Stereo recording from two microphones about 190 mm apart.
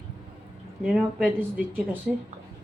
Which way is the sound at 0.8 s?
5° right (ahead or behind).